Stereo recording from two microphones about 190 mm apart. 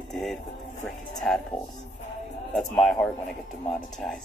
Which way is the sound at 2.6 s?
Centre (ahead or behind).